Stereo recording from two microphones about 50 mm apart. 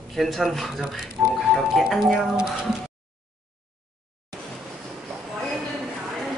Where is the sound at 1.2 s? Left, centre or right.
Right.